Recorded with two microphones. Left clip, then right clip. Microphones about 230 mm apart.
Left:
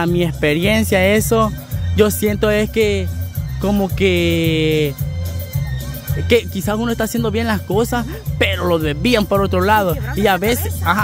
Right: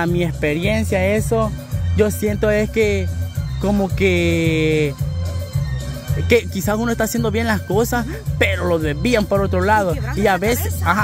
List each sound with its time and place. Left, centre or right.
0.0 s speech: centre
6.2 s speech: centre